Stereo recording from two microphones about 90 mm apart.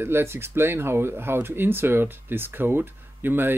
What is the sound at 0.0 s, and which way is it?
Speech, 25° right (ahead or behind).